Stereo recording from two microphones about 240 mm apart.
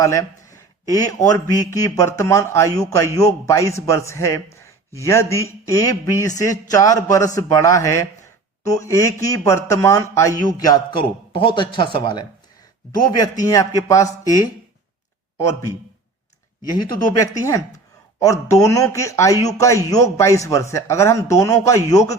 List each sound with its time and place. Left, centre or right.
0.0 s a man's voice: centre
16.7 s speech: centre